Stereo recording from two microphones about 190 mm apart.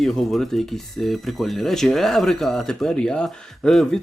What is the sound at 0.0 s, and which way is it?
Speech, centre (ahead or behind).